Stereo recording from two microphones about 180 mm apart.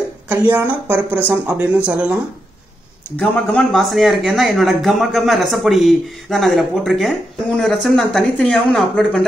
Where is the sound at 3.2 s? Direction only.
5° left (ahead or behind).